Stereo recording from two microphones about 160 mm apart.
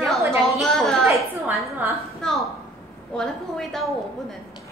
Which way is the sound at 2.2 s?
Centre (ahead or behind).